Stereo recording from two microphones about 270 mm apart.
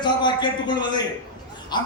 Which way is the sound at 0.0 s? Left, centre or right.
Centre.